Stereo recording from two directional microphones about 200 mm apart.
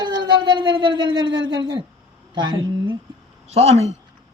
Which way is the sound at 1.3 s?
65° right (ahead or behind).